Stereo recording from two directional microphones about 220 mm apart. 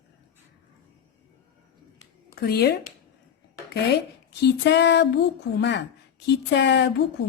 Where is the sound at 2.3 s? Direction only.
45° left (ahead or behind).